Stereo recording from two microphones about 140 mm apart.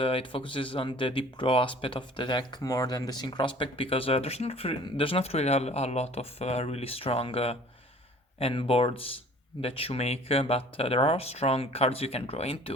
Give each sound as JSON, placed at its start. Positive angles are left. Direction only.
{"t": 0.0, "sound": "speech", "side_deg": 40}